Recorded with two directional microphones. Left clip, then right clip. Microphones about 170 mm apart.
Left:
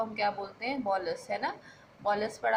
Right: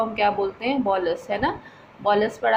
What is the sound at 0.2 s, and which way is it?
A woman's voice, 30° right (ahead or behind).